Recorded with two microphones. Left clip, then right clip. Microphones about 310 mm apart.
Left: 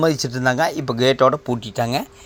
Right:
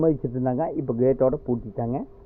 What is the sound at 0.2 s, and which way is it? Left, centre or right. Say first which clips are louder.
Speech: left 7 dB; centre.